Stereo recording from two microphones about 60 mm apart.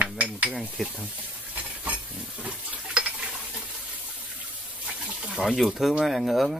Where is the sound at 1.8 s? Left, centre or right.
Right.